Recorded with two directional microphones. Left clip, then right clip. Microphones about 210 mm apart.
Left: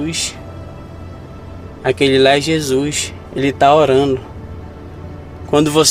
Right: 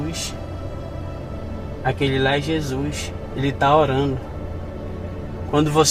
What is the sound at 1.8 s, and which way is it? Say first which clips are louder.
Speech: left 9 dB; 55° left (ahead or behind).